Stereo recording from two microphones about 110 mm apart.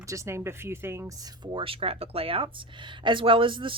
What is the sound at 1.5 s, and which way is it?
Speech, 55° right (ahead or behind).